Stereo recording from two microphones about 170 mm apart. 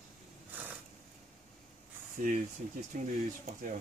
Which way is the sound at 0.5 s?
10° right (ahead or behind).